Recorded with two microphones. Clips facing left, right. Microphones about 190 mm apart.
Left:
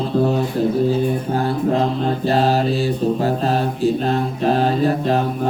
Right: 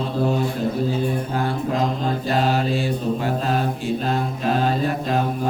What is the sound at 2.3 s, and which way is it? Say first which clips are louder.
Mantra: left 4 dB; 40° left (ahead or behind).